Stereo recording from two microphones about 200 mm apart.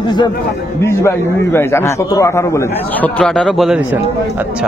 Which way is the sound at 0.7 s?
15° left (ahead or behind).